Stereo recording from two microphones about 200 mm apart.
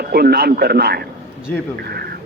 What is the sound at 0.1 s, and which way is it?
A man's voice, 55° right (ahead or behind).